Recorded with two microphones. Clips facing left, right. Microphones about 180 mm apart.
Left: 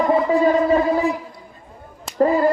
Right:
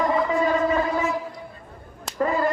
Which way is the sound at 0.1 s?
35° left (ahead or behind).